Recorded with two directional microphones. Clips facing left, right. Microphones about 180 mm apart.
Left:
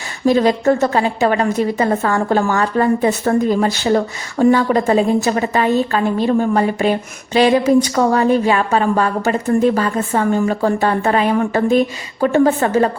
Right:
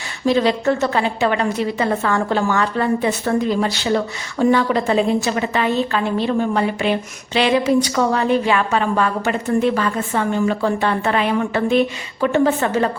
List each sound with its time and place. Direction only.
0.3 s a woman's voice: 45° left (ahead or behind)